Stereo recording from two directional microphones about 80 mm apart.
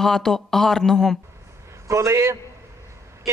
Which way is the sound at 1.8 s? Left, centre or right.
Right.